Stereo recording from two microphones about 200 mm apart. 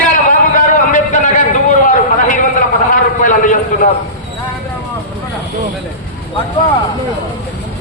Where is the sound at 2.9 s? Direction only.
40° left (ahead or behind).